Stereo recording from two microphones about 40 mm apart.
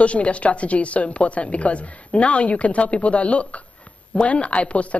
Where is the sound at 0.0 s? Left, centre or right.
Left.